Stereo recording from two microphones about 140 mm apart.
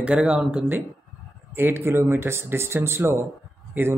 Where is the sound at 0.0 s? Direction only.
5° right (ahead or behind).